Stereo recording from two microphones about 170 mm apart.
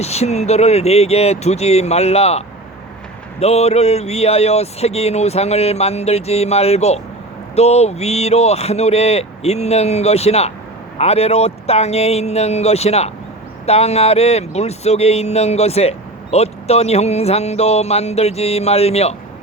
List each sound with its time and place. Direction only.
0.0 s speech: 40° left (ahead or behind)
3.4 s speech: 40° left (ahead or behind)